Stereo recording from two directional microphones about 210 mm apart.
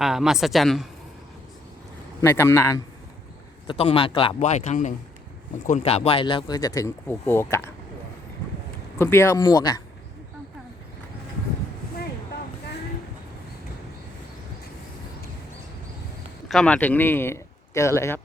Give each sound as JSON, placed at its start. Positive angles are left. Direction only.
{"t": 0.0, "sound": "speech", "side_deg": 0}
{"t": 2.2, "sound": "speech", "side_deg": 10}
{"t": 3.7, "sound": "a man's voice", "side_deg": 25}
{"t": 4.4, "sound": "speech", "side_deg": 35}
{"t": 9.0, "sound": "speech", "side_deg": 10}
{"t": 16.5, "sound": "a man's voice", "side_deg": 5}